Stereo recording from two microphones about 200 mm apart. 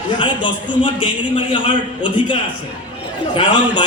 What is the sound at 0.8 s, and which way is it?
A man's voice, 25° left (ahead or behind).